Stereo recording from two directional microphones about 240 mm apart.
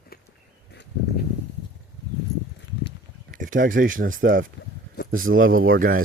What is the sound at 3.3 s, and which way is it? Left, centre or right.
Speech, right.